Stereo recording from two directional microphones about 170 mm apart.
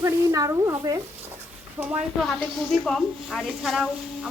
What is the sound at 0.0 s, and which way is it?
A woman's voice, 20° right (ahead or behind).